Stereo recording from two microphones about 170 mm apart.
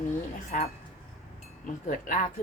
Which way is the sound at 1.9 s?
50° left (ahead or behind).